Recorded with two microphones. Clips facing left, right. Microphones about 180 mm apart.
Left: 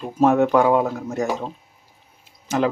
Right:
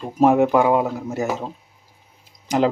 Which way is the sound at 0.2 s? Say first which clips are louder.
Right 1 dB; 10° right (ahead or behind).